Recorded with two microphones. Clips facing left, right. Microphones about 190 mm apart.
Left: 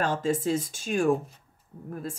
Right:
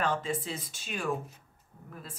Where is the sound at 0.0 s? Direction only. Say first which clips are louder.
Left 5 dB; 45° left (ahead or behind).